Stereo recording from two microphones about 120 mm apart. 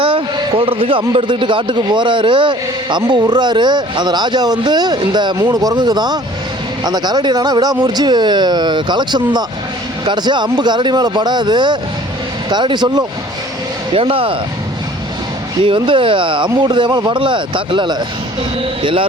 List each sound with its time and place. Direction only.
0.0 s a man's voice: 45° right (ahead or behind)
13.9 s speech: 50° right (ahead or behind)
15.6 s speech: 45° right (ahead or behind)